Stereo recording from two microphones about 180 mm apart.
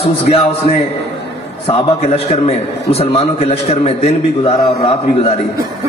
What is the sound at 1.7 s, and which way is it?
A man's voice, 35° left (ahead or behind).